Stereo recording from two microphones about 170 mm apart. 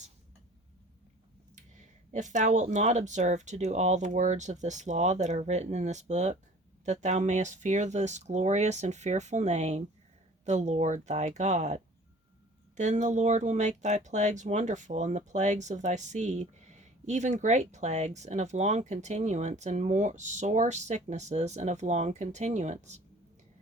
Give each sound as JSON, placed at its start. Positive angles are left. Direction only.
{"t": 1.5, "sound": "speech", "side_deg": -45}